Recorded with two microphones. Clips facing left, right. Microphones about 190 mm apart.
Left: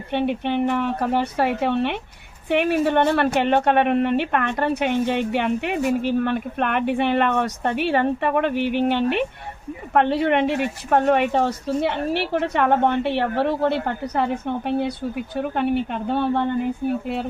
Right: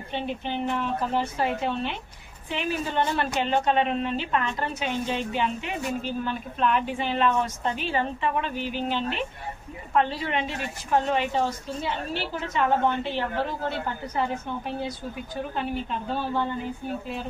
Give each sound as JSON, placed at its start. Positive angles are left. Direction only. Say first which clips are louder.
{"t": 0.1, "sound": "speech", "louder": "left 8 dB", "side_deg": 65}
{"t": 15.5, "sound": "speech", "louder": "left 8 dB", "side_deg": 60}